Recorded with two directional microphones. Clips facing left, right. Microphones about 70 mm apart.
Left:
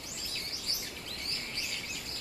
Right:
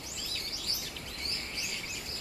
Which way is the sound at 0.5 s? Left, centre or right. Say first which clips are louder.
Right 1 dB; left.